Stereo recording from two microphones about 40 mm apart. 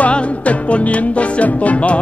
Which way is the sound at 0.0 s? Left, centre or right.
Left.